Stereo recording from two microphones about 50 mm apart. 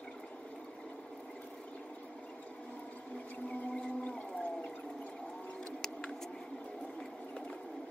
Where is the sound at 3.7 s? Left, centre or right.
Left.